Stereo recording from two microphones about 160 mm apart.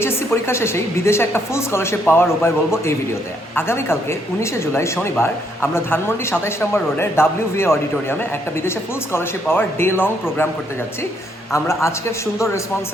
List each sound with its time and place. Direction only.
0.0 s a woman's voice: 15° left (ahead or behind)
9.1 s a woman's voice: 15° left (ahead or behind)
11.5 s a woman's voice: 15° left (ahead or behind)